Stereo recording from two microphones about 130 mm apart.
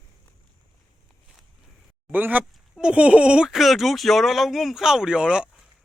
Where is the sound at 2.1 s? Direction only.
15° right (ahead or behind).